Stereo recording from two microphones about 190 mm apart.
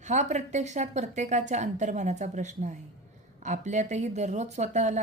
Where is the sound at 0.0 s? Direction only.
40° right (ahead or behind).